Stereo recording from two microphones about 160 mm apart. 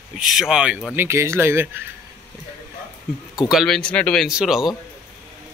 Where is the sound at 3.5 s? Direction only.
Centre (ahead or behind).